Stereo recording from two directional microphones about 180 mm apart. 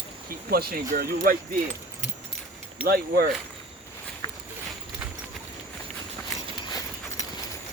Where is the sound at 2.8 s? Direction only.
60° right (ahead or behind).